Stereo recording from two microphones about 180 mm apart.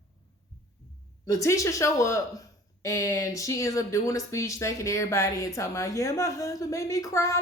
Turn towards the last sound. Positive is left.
turn(degrees=15)  # may be behind; listen again after turning